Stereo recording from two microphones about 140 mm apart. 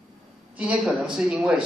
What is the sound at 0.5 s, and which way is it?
A man's voice, 10° right (ahead or behind).